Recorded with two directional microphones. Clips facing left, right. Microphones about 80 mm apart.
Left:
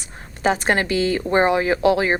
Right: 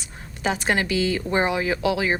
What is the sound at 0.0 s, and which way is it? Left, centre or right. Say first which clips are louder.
A woman's voice: left 5 dB; left.